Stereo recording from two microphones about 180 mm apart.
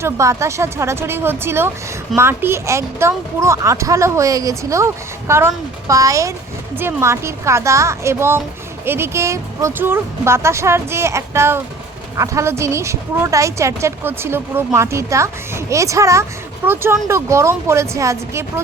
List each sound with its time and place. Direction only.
0.0 s a woman's voice: 15° right (ahead or behind)